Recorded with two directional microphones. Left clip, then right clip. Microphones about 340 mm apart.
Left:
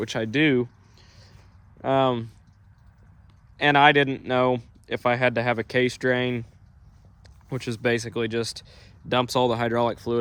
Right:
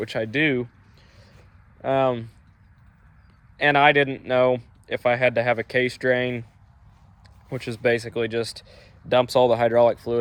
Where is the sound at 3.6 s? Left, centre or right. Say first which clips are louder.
Even; centre.